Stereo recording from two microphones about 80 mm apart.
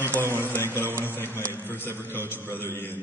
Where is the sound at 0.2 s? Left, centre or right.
Right.